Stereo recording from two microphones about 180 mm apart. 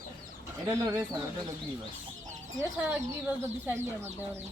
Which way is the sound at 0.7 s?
15° right (ahead or behind).